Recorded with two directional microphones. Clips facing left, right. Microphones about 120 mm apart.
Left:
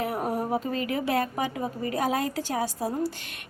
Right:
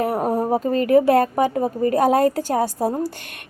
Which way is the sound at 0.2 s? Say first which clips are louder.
Right 7 dB; 30° right (ahead or behind).